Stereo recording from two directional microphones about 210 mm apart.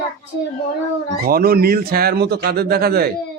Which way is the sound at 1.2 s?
45° right (ahead or behind).